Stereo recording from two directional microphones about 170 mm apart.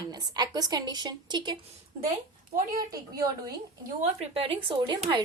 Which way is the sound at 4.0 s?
35° right (ahead or behind).